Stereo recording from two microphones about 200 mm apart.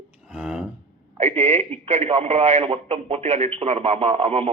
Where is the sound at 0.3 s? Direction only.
5° right (ahead or behind).